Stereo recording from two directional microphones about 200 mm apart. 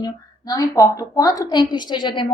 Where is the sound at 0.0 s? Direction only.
20° left (ahead or behind).